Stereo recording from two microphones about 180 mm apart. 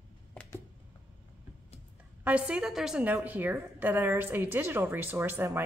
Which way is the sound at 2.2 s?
10° right (ahead or behind).